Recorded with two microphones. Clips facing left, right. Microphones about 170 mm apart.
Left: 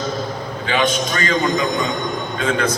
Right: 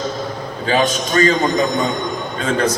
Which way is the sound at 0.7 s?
40° right (ahead or behind).